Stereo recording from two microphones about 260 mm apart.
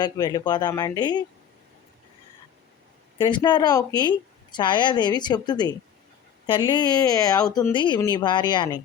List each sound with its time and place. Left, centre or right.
0.0 s speech: centre
3.2 s speech: centre